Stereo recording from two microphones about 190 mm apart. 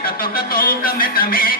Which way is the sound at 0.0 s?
50° left (ahead or behind).